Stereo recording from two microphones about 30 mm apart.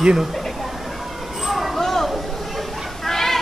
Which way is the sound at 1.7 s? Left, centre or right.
Centre.